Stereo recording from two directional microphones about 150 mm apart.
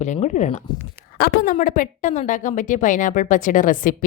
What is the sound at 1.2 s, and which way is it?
A woman's voice, 70° left (ahead or behind).